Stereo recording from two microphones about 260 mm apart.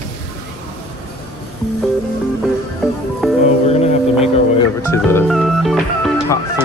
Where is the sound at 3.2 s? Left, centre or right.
Centre.